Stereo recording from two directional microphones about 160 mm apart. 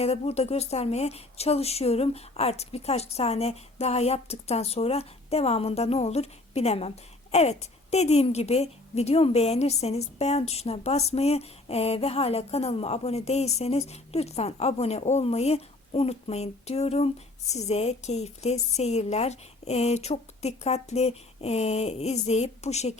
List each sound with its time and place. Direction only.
0.0 s a woman's voice: 40° left (ahead or behind)